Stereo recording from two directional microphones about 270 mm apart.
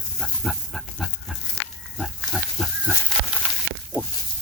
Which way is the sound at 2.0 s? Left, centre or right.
Centre.